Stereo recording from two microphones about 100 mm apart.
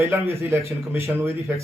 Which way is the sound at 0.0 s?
25° right (ahead or behind).